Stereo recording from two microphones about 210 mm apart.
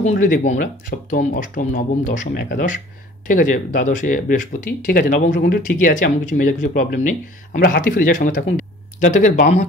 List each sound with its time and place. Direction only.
0.0 s speech: 40° left (ahead or behind)